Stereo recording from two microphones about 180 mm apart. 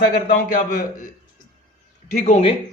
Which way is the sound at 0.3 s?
50° left (ahead or behind).